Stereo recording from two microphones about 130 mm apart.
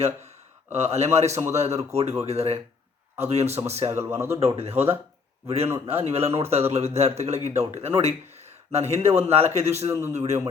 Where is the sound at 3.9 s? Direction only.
20° right (ahead or behind).